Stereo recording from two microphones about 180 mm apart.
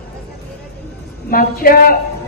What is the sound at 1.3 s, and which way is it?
Speech, 55° left (ahead or behind).